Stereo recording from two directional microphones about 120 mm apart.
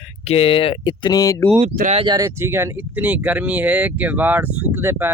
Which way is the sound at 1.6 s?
75° right (ahead or behind).